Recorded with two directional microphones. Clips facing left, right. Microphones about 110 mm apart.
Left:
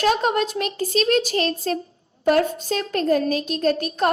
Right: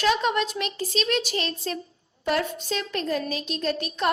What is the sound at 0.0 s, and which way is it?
A woman's voice, 45° left (ahead or behind).